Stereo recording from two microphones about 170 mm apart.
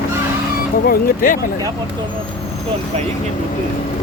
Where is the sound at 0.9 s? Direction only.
55° left (ahead or behind).